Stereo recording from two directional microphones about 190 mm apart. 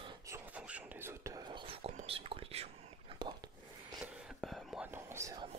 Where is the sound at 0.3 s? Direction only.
5° right (ahead or behind).